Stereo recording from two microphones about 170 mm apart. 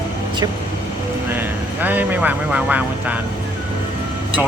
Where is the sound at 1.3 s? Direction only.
10° right (ahead or behind).